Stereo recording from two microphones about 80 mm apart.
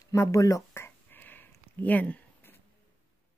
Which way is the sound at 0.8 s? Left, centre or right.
Left.